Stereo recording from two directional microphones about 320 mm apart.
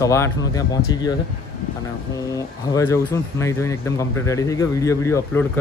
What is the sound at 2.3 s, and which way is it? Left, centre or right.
Speech, centre.